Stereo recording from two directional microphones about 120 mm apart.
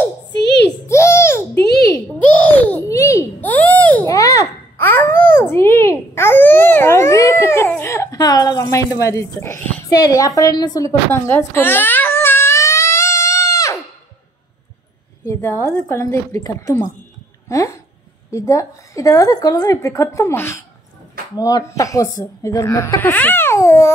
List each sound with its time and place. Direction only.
0.8 s babbling: 25° left (ahead or behind)
2.9 s babbling: 25° left (ahead or behind)
3.3 s a sound: 15° left (ahead or behind)
4.1 s babbling: 25° left (ahead or behind)
9.8 s a sound: 30° left (ahead or behind)
15.2 s a woman's voice: 25° left (ahead or behind)
23.0 s speech: 15° left (ahead or behind)